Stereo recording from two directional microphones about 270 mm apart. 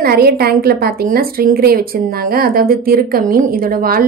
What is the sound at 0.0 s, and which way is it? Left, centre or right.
A woman's voice, right.